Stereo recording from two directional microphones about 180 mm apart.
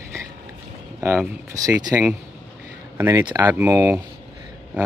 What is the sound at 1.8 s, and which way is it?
Speech, 20° right (ahead or behind).